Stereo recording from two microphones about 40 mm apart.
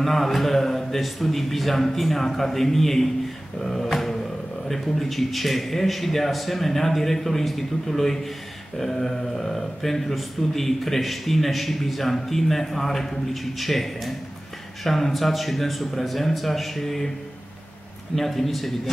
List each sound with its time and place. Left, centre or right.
0.0 s speech: centre
3.6 s a sound: centre
4.6 s speech: centre
18.1 s speech: centre